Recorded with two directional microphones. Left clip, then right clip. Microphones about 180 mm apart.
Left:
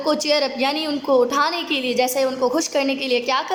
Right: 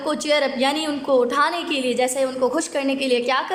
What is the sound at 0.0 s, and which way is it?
A woman's voice, 5° left (ahead or behind).